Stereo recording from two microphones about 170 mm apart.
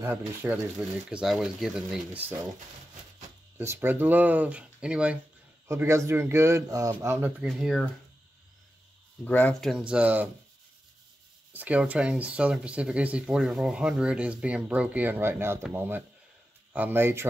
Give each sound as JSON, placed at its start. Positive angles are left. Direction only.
{"t": 0.0, "sound": "speech", "side_deg": -15}
{"t": 3.5, "sound": "speech", "side_deg": -10}
{"t": 7.4, "sound": "speech", "side_deg": 0}
{"t": 9.2, "sound": "speech", "side_deg": 10}
{"t": 11.5, "sound": "speech", "side_deg": -10}